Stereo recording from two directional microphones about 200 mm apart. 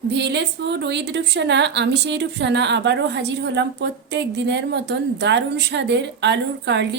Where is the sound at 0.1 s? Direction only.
60° right (ahead or behind).